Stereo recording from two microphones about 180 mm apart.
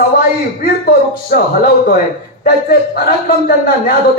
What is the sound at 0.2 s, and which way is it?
Speech, 55° left (ahead or behind).